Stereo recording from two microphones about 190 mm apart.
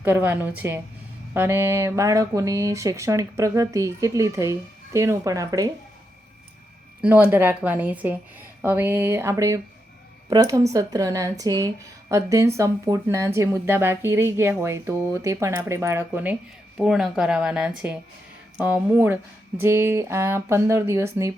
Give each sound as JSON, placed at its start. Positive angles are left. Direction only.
{"t": 0.0, "sound": "speech", "side_deg": -10}
{"t": 7.0, "sound": "speech", "side_deg": -10}